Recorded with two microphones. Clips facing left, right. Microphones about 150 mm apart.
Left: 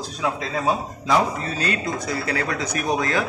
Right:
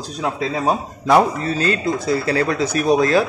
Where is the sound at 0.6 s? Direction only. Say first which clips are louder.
Right 1 dB; 55° right (ahead or behind).